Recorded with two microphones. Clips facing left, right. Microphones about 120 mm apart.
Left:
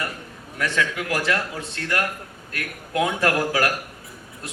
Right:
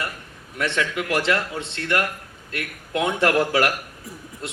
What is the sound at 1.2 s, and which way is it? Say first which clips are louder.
A man's voice: right 1 dB; 25° right (ahead or behind).